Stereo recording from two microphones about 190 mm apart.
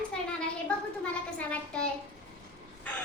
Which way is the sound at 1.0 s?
5° left (ahead or behind).